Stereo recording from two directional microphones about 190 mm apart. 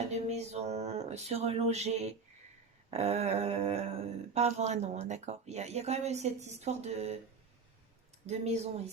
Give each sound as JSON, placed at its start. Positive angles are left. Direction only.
{"t": 0.1, "sound": "a sound", "side_deg": -35}
{"t": 2.9, "sound": "speech", "side_deg": -35}
{"t": 8.3, "sound": "speech", "side_deg": -35}